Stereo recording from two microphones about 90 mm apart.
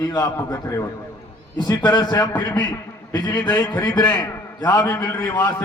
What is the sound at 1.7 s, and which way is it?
A man's voice, 50° left (ahead or behind).